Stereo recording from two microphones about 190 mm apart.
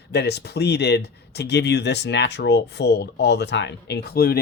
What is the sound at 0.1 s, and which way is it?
Speech, 60° left (ahead or behind).